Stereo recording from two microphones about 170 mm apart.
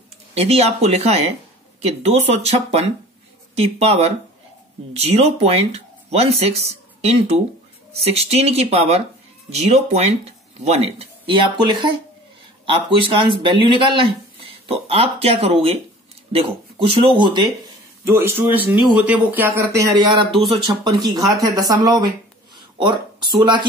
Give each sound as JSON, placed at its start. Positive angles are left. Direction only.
{"t": 0.3, "sound": "speech", "side_deg": -35}
{"t": 18.0, "sound": "speech", "side_deg": -15}
{"t": 21.5, "sound": "speech", "side_deg": -20}
{"t": 23.4, "sound": "speech", "side_deg": -25}